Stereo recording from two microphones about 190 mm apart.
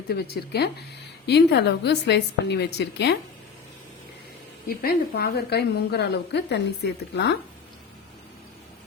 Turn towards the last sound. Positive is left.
turn(degrees=65)  # may be behind; listen again after turning